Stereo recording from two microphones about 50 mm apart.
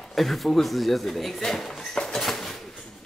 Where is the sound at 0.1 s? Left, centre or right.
Centre.